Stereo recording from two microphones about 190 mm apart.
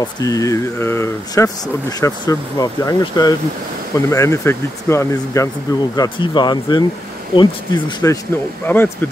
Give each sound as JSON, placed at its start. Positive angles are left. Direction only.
{"t": 0.2, "sound": "speech", "side_deg": 15}